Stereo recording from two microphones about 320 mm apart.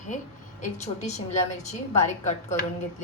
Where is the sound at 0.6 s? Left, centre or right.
Left.